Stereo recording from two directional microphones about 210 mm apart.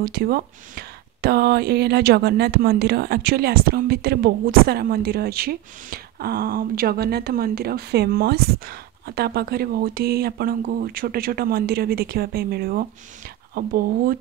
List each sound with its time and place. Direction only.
0.0 s speech: 45° right (ahead or behind)